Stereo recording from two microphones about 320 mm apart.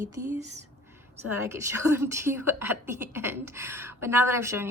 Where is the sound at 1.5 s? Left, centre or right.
Centre.